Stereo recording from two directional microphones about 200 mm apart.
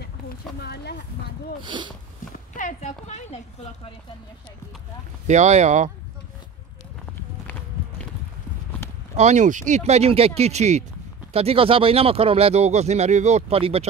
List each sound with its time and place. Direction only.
0.6 s speech: 50° left (ahead or behind)
1.6 s speech: 25° right (ahead or behind)
2.5 s a woman's voice: 40° left (ahead or behind)
5.2 s speech: 35° right (ahead or behind)
9.1 s speech: 35° right (ahead or behind)